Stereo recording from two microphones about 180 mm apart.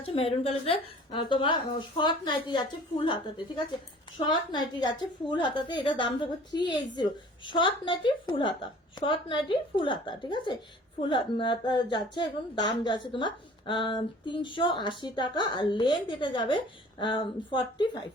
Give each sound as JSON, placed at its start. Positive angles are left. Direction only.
{"t": 0.0, "sound": "a woman's voice", "side_deg": 30}